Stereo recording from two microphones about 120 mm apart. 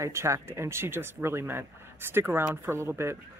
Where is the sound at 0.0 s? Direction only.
25° right (ahead or behind).